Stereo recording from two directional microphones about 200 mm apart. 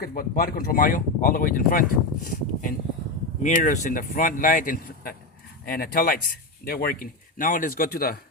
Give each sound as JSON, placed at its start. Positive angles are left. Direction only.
{"t": 0.0, "sound": "speech", "side_deg": 50}